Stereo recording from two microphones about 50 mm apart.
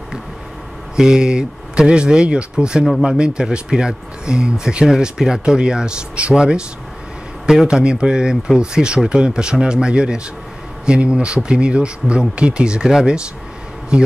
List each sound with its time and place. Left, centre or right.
0.9 s speech: centre
7.6 s speech: centre